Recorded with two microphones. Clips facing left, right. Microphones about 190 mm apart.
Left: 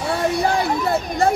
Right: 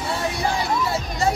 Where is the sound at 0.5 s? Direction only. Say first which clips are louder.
Left 4 dB; 55° left (ahead or behind).